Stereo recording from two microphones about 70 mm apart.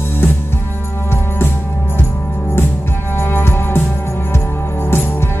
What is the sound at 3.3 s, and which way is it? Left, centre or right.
Music, left.